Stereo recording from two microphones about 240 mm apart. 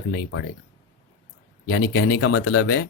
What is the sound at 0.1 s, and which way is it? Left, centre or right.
Speech, left.